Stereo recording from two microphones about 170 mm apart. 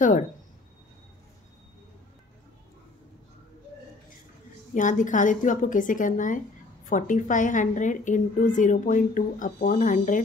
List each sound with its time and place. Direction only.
4.7 s a woman's voice: 50° left (ahead or behind)